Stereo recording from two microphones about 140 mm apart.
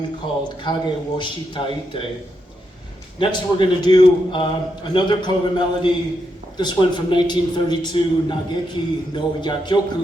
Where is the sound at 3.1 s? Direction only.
35° left (ahead or behind).